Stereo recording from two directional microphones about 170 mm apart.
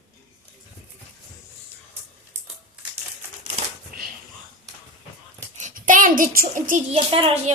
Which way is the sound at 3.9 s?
60° right (ahead or behind).